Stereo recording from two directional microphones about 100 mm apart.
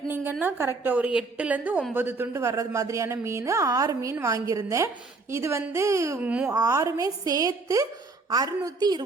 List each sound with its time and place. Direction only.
0.1 s a woman's voice: 20° right (ahead or behind)
2.3 s a woman's voice: 30° right (ahead or behind)
6.1 s a woman's voice: 15° right (ahead or behind)
6.5 s a woman's voice: 35° right (ahead or behind)